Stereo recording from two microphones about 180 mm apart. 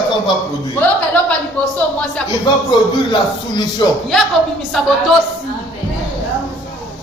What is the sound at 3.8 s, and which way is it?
Speech, 25° left (ahead or behind).